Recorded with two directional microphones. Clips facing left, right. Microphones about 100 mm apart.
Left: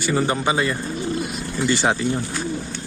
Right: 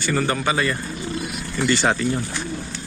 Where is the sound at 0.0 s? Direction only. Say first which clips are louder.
Left 1 dB; 15° left (ahead or behind).